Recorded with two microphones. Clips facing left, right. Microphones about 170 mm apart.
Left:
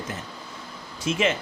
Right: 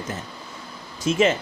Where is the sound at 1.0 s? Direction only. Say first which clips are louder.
Right 4 dB; 40° right (ahead or behind).